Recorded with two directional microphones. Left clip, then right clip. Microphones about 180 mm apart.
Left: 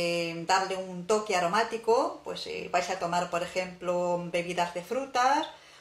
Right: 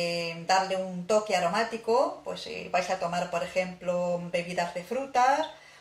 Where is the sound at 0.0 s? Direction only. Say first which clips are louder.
Left 1 dB; 55° left (ahead or behind).